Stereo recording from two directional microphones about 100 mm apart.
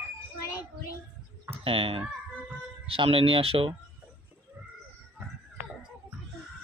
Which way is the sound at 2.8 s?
65° right (ahead or behind).